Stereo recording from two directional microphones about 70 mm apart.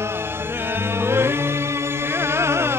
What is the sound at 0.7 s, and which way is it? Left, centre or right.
Singing, right.